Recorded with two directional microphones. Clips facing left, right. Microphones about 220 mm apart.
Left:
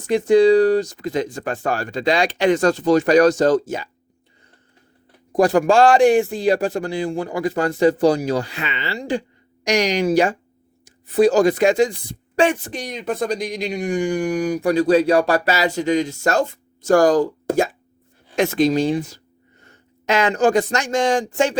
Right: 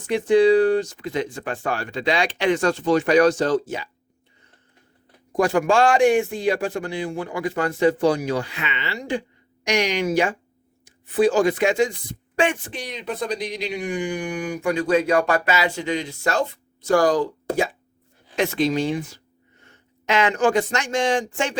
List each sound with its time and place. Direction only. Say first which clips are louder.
0.1 s a man's voice: left 3 dB; 40° left (ahead or behind)
5.3 s a man's voice: left 4 dB; 35° left (ahead or behind)